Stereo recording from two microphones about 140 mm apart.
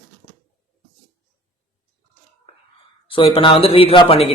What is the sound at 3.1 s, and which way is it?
Speech, 40° left (ahead or behind).